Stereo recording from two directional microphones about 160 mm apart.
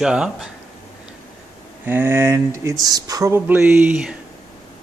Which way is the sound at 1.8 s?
15° right (ahead or behind).